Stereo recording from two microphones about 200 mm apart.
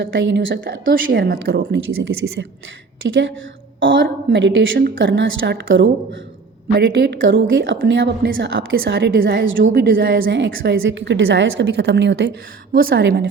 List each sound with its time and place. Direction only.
0.0 s a woman's voice: 65° right (ahead or behind)
1.9 s a woman's voice: 80° right
6.7 s a woman's voice: 55° right (ahead or behind)
10.5 s speech: 45° right (ahead or behind)
10.8 s a woman's voice: 65° right (ahead or behind)
12.7 s speech: 50° right (ahead or behind)